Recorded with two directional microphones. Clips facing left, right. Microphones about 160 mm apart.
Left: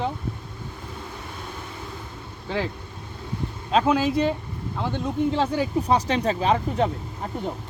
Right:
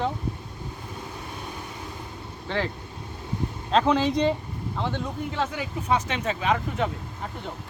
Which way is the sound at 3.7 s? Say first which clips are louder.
Left 1 dB; 5° left (ahead or behind).